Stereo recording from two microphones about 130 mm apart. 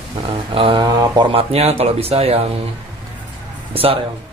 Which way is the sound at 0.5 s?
40° right (ahead or behind).